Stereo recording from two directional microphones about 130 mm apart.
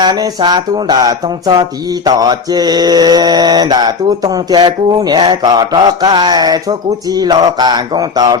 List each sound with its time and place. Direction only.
0.0 s mantra: 30° right (ahead or behind)